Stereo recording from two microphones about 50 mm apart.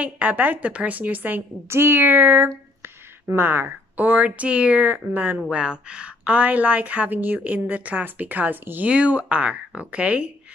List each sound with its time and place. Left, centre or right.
0.0 s a woman's voice: right
1.7 s a woman's voice: right
5.6 s a woman's voice: right
8.8 s speech: right